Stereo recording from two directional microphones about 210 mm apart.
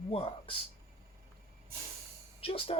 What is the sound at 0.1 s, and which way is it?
Speech, 25° left (ahead or behind).